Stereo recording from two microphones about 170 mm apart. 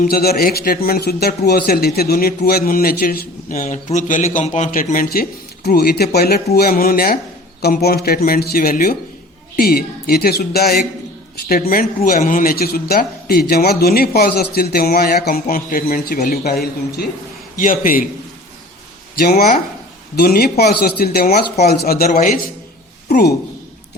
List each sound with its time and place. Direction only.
0.0 s speech: 65° left (ahead or behind)
5.6 s speech: 65° left (ahead or behind)
17.6 s a man's voice: 55° left (ahead or behind)
19.2 s speech: 65° left (ahead or behind)